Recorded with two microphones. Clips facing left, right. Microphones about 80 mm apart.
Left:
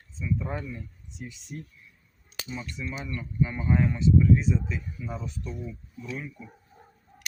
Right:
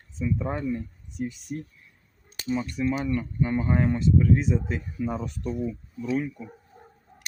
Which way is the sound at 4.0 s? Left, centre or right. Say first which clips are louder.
Even; right.